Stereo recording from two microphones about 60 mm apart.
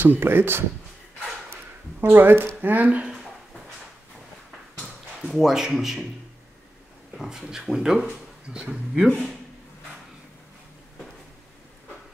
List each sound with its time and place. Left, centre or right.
0.0 s speech: right
2.0 s speech: right
3.1 s a sound: centre
5.3 s speech: centre
7.2 s speech: centre